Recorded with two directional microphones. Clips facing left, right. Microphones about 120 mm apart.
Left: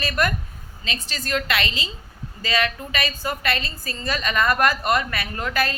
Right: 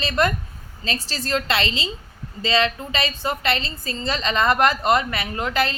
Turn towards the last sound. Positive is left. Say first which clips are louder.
# right 2 dB
turn(degrees=-20)  # may be behind; listen again after turning